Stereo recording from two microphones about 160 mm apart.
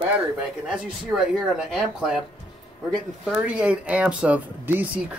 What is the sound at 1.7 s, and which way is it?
Speech, centre (ahead or behind).